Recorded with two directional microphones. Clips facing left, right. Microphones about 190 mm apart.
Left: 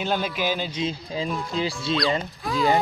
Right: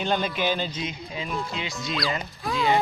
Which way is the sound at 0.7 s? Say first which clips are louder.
Left 5 dB; 30° left (ahead or behind).